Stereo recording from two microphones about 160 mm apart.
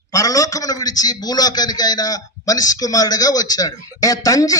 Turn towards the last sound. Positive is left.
turn(degrees=20)  # may be behind; listen again after turning